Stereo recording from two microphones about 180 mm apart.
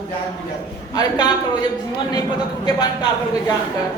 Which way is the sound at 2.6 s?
20° left (ahead or behind).